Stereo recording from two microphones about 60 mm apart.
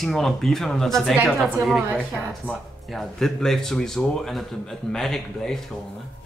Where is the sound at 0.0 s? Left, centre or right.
Centre.